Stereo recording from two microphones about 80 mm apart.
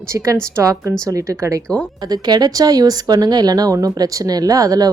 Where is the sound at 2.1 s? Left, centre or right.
Right.